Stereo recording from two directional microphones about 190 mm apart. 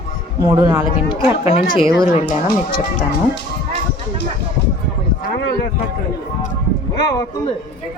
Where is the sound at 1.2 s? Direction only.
35° left (ahead or behind).